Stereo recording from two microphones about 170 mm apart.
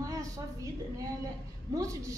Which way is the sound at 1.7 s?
20° right (ahead or behind).